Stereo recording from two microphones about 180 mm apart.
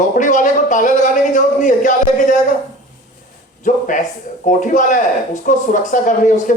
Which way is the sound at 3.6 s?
45° left (ahead or behind).